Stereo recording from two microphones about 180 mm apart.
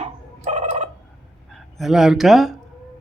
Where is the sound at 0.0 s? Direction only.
40° right (ahead or behind).